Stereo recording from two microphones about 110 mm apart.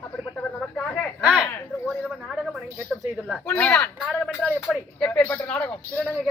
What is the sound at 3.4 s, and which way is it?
Speech, 15° left (ahead or behind).